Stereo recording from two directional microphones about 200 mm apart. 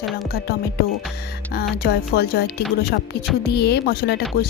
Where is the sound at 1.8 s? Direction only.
50° left (ahead or behind).